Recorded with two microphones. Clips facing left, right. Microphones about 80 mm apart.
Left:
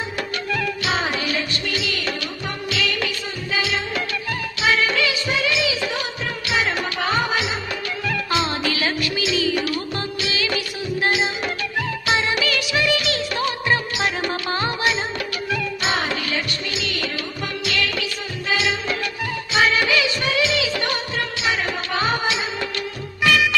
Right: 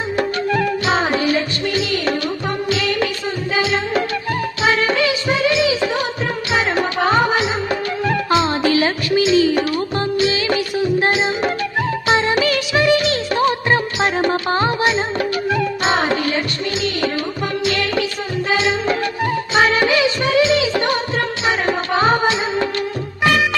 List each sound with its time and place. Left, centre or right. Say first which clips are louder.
0.2 s music: right 8 dB; right
3.5 s music of bollywood: right 5 dB; right
4.6 s music: right 3 dB; right
12.0 s music of bollywood: right 5 dB; right
17.7 s music: right 4 dB; right
18.5 s music of bollywood: right 4 dB; right
21.4 s music: right 5 dB; right